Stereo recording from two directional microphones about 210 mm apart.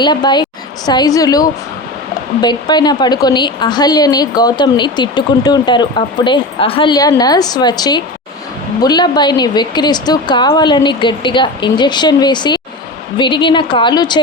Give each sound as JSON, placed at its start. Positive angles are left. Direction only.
{"t": 0.0, "sound": "a woman's voice", "side_deg": 20}